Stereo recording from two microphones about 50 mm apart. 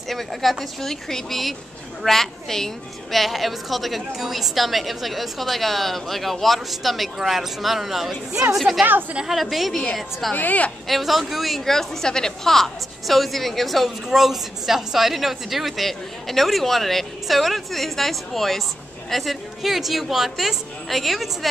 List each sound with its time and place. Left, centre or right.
0.1 s a woman's voice: centre
10.3 s a woman's voice: left
10.9 s a woman's voice: centre